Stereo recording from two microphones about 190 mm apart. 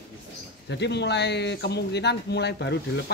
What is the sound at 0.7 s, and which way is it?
Speech, 65° left (ahead or behind).